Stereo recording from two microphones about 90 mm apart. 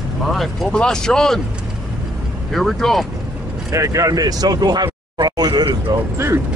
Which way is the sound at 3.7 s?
40° right (ahead or behind).